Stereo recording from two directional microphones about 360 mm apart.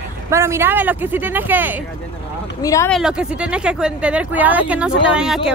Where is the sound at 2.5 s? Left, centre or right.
Centre.